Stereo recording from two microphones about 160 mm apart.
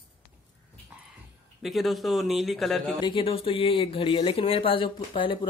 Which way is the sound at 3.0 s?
35° left (ahead or behind).